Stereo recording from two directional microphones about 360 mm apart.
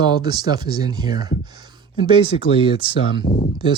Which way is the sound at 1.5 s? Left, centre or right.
Centre.